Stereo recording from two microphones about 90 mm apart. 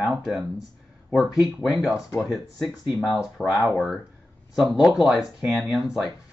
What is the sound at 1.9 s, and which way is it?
Speech, 35° left (ahead or behind).